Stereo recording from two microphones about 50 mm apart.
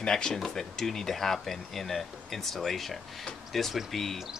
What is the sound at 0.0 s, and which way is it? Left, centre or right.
Speech, centre.